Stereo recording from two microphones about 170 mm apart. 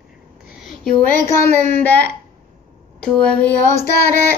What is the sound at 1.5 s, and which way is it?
Speech, 45° right (ahead or behind).